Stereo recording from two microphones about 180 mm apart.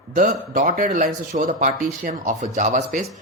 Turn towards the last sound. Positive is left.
turn(degrees=-45)  # may be behind; listen again after turning